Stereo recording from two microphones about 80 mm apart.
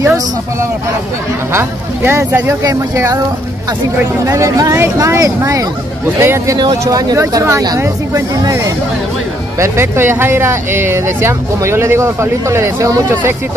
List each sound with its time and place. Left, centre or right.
0.0 s speech: right
3.0 s speech: right
6.1 s speech: right
6.8 s speech: right
9.6 s speech: right